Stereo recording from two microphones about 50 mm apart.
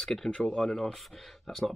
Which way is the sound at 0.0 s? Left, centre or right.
Centre.